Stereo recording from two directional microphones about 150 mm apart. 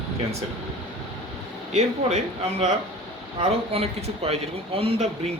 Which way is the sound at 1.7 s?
45° right (ahead or behind).